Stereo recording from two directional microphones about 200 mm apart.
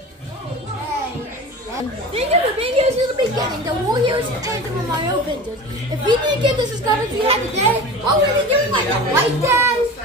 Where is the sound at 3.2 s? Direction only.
20° right (ahead or behind).